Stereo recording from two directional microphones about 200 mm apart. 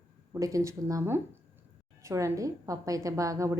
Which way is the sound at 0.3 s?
15° right (ahead or behind).